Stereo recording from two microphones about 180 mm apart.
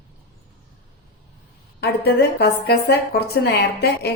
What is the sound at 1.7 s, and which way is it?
A woman's voice, 65° left (ahead or behind).